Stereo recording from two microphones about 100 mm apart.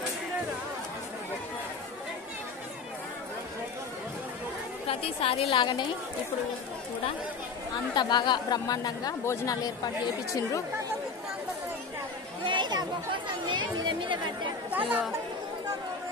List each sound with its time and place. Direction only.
4.8 s a woman's voice: 70° left (ahead or behind); by 5.9 s 55° left (ahead or behind)
7.9 s speech: 50° left (ahead or behind)
9.2 s speech: 30° left (ahead or behind)
12.4 s chatter: 50° right (ahead or behind)
14.7 s chatter: 15° right (ahead or behind)